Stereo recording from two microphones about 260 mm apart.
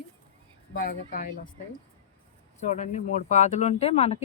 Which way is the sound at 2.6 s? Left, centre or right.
Left.